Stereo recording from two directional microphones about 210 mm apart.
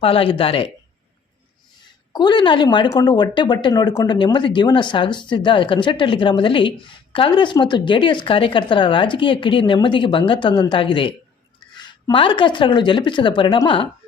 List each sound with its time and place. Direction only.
0.0 s speech: 25° left (ahead or behind)
2.1 s speech: 20° left (ahead or behind)